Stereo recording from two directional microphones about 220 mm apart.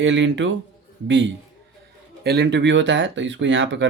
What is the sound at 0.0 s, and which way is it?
Speech, 55° right (ahead or behind).